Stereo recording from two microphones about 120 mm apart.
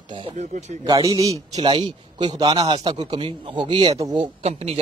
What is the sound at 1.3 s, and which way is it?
Speech, 35° right (ahead or behind).